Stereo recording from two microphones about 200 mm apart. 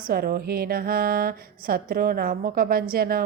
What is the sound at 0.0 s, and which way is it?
A woman's voice, 45° right (ahead or behind).